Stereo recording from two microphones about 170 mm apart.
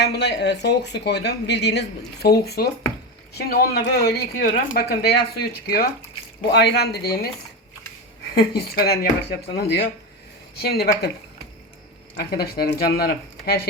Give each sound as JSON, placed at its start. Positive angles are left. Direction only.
{"t": 0.0, "sound": "speech", "side_deg": 80}
{"t": 6.5, "sound": "speech", "side_deg": 80}
{"t": 8.4, "sound": "speech", "side_deg": 65}
{"t": 9.6, "sound": "speech", "side_deg": 85}
{"t": 10.5, "sound": "speech", "side_deg": 65}
{"t": 12.1, "sound": "speech", "side_deg": 65}